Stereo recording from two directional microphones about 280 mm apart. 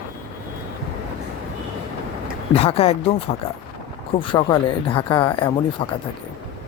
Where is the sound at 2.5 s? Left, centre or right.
Left.